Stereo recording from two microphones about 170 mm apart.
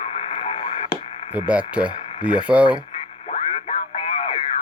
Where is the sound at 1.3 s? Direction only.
10° right (ahead or behind).